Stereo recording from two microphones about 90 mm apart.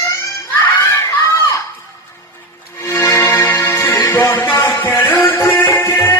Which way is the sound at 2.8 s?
25° left (ahead or behind).